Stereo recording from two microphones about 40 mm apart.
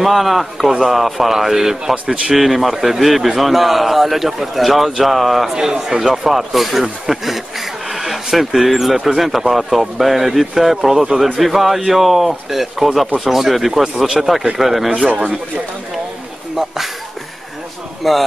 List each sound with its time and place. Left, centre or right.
0.0 s a man's voice: centre
5.6 s a man's voice: centre
15.0 s speech: right
16.5 s speech: centre
18.0 s a man's voice: centre